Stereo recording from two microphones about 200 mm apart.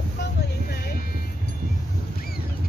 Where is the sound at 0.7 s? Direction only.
50° left (ahead or behind).